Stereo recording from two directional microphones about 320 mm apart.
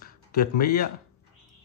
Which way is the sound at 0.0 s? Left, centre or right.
Left.